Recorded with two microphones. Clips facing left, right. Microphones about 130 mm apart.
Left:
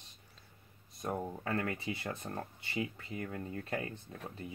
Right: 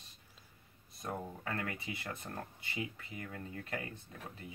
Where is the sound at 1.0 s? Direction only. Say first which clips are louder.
Left 4 dB; 25° left (ahead or behind).